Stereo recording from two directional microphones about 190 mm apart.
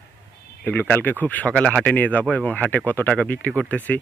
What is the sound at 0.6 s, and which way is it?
Speech, 10° left (ahead or behind).